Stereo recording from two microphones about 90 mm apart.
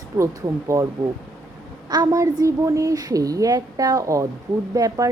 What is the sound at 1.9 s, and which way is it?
Speech, 45° right (ahead or behind).